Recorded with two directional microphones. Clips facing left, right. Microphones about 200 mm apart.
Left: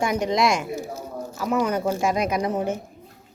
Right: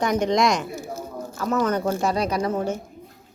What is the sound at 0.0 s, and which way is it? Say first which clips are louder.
Speech: right 1 dB; 5° left (ahead or behind).